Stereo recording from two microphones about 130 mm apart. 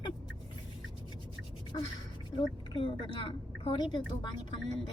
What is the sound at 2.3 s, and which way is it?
A woman's voice, 40° left (ahead or behind).